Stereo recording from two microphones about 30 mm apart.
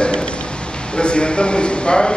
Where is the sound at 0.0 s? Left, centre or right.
Left.